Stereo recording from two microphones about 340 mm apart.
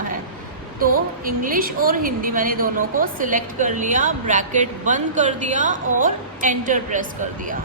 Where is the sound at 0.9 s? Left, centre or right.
Right.